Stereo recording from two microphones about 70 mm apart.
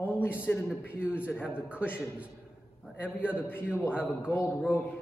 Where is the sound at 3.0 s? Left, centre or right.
Left.